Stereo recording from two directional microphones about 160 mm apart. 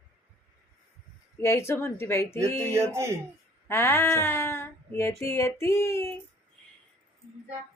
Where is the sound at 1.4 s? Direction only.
15° left (ahead or behind).